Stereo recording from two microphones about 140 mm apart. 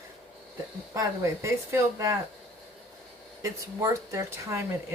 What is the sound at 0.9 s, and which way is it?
Speech, 20° right (ahead or behind).